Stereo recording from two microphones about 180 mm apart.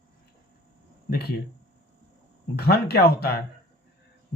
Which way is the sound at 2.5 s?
60° left (ahead or behind).